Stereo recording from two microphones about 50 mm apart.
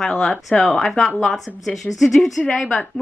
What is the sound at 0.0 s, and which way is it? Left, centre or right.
A woman's voice, centre.